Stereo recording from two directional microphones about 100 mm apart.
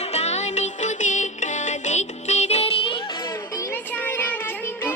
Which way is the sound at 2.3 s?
90° left.